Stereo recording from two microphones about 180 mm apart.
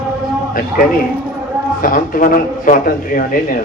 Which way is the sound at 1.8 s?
50° left (ahead or behind).